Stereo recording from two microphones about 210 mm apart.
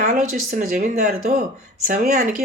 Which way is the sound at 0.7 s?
45° right (ahead or behind).